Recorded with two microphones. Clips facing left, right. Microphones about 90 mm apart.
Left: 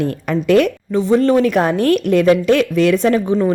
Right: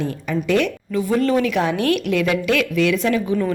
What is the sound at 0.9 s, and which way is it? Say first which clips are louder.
A woman's voice: left 4 dB; 25° left (ahead or behind).